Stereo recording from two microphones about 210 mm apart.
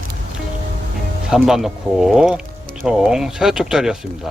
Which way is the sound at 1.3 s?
Centre (ahead or behind).